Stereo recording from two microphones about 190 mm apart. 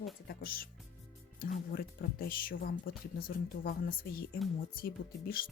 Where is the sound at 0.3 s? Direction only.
50° left (ahead or behind).